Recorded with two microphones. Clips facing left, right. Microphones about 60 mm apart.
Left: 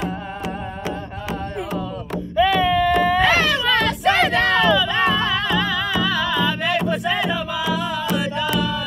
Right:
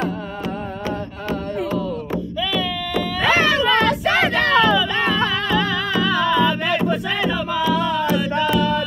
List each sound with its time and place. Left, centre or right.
2.6 s baby cry: left
3.2 s music: centre